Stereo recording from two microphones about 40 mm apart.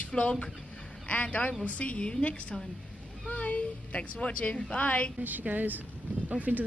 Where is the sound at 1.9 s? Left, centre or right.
Left.